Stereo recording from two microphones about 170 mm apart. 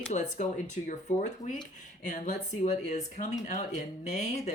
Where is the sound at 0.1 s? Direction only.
45° left (ahead or behind).